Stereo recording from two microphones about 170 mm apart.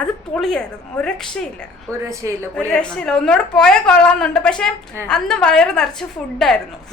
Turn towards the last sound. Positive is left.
turn(degrees=0)  # may be behind; listen again after turning